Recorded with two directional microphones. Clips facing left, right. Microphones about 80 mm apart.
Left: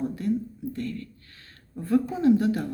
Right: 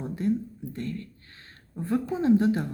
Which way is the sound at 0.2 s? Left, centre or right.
Right.